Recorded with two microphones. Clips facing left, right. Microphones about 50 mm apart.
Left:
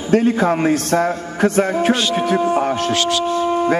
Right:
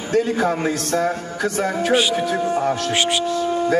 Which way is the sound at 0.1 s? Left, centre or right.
Left.